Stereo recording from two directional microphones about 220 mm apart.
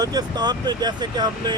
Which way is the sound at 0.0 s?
20° right (ahead or behind).